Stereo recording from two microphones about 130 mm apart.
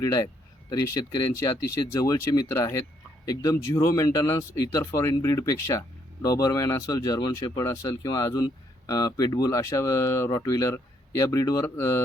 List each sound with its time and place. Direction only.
0.0 s speech: 25° left (ahead or behind)